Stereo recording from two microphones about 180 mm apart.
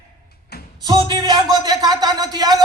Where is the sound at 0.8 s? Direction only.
25° right (ahead or behind).